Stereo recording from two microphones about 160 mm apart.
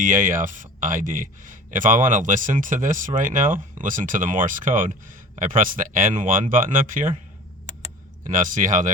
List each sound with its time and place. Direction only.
0.0 s speech: 55° right (ahead or behind)
8.2 s speech: 55° right (ahead or behind)